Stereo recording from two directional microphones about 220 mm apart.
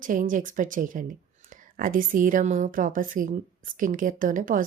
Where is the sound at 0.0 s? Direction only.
35° right (ahead or behind).